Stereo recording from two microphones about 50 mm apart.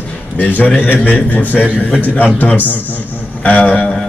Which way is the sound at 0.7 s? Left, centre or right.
Left.